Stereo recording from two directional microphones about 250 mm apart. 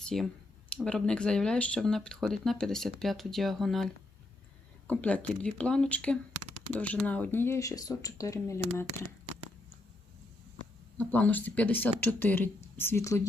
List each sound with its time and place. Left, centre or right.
0.0 s speech: centre
6.3 s a sound: right
6.7 s speech: centre
10.9 s speech: centre